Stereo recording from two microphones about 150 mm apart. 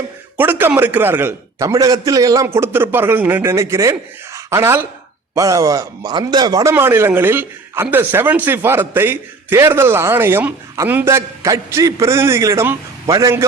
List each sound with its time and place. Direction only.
0.3 s speech: 15° right (ahead or behind)